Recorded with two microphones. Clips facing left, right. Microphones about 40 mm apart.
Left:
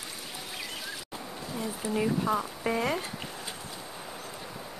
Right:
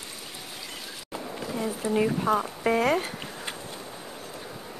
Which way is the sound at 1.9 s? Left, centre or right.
Right.